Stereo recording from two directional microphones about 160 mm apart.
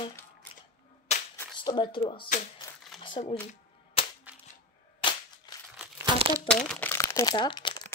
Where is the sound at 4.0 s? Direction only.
35° left (ahead or behind).